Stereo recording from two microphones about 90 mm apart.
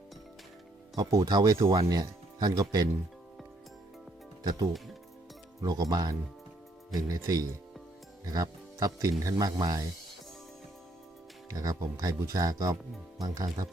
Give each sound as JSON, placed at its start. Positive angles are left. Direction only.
{"t": 0.9, "sound": "speech", "side_deg": -45}
{"t": 4.4, "sound": "speech", "side_deg": -45}
{"t": 11.4, "sound": "speech", "side_deg": -45}